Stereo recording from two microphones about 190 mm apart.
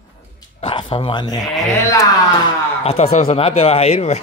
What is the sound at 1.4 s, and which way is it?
Speech, centre (ahead or behind).